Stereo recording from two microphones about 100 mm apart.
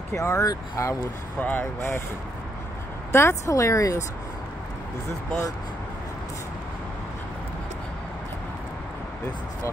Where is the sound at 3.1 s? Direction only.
30° left (ahead or behind).